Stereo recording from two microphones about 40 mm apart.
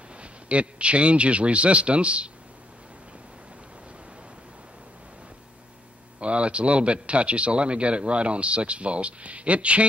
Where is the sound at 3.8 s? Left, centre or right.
Right.